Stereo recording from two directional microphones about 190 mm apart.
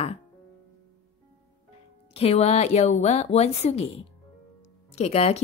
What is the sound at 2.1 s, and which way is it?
Speech, 30° left (ahead or behind).